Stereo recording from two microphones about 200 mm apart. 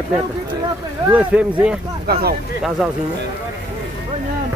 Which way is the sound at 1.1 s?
5° right (ahead or behind).